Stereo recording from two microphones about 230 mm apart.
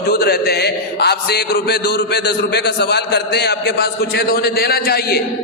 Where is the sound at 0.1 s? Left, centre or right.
Left.